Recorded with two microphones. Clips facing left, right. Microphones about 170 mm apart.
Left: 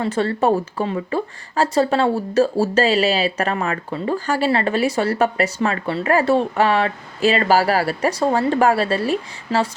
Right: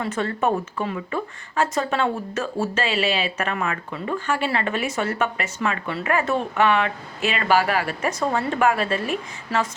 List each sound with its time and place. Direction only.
0.0 s speech: 30° left (ahead or behind)